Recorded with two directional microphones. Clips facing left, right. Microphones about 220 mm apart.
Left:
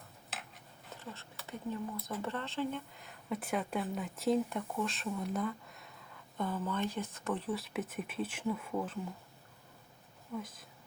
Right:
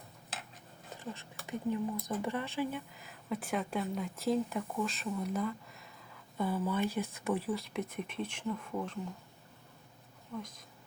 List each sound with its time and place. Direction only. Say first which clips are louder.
1.5 s speech: right 5 dB; 15° right (ahead or behind)
7.5 s speech: right 1 dB; 5° left (ahead or behind)
10.3 s speech: left 1 dB; 5° left (ahead or behind)